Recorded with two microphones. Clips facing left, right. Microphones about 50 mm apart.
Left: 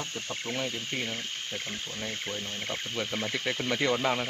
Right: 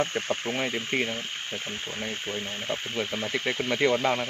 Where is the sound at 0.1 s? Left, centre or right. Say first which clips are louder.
Right 7 dB; right.